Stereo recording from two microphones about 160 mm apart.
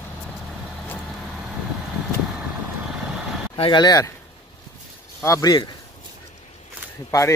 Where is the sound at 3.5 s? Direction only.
30° left (ahead or behind).